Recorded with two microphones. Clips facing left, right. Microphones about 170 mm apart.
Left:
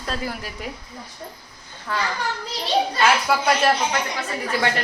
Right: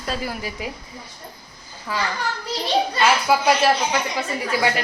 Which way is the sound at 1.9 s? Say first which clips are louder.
Even; 5° right (ahead or behind).